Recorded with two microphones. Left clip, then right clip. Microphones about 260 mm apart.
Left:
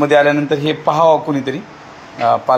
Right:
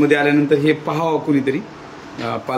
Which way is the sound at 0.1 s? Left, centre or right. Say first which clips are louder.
Left 3 dB; centre.